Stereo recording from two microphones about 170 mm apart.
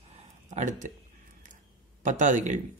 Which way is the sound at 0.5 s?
45° right (ahead or behind).